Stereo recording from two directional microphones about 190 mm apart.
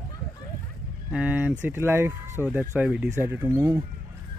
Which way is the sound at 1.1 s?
10° right (ahead or behind).